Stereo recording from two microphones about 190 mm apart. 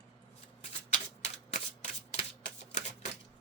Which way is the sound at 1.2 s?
35° left (ahead or behind).